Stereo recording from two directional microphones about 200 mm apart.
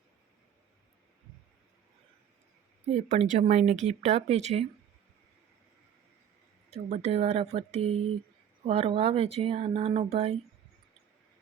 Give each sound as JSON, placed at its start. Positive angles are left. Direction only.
{"t": 2.8, "sound": "speech", "side_deg": -30}
{"t": 6.7, "sound": "speech", "side_deg": -30}